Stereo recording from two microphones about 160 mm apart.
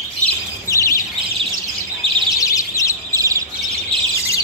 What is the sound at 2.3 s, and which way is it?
Bird, 20° left (ahead or behind).